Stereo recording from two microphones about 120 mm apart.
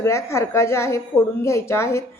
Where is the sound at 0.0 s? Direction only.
25° left (ahead or behind).